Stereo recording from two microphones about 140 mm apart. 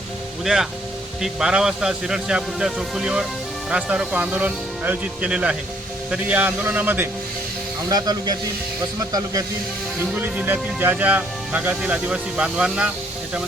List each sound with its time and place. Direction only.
0.4 s speech: 5° right (ahead or behind)
7.9 s speech: 30° right (ahead or behind)
10.2 s speech: 10° right (ahead or behind)